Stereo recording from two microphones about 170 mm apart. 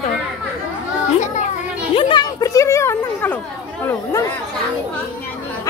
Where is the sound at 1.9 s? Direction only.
30° left (ahead or behind).